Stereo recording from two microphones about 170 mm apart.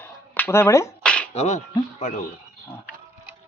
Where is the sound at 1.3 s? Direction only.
40° left (ahead or behind).